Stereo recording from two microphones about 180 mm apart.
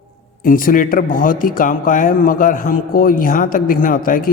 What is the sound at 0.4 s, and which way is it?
Speech, 50° left (ahead or behind).